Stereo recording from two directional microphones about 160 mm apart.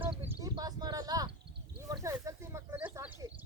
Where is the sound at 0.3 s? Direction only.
25° right (ahead or behind).